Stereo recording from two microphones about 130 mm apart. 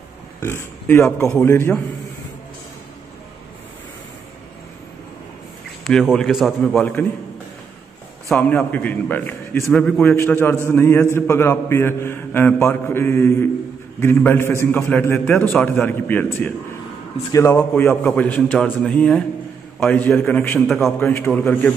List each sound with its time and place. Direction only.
0.4 s a man's voice: 20° left (ahead or behind)
5.9 s a man's voice: centre (ahead or behind)
8.4 s a man's voice: 10° left (ahead or behind)
9.9 s a man's voice: 15° left (ahead or behind)
20.6 s a man's voice: centre (ahead or behind)
21.0 s a man's voice: 20° left (ahead or behind)